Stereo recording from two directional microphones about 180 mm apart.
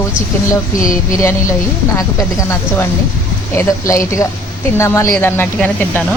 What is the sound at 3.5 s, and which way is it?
A woman's voice, 15° left (ahead or behind).